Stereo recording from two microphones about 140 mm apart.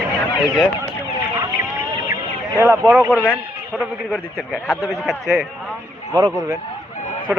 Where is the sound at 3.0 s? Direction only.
10° left (ahead or behind).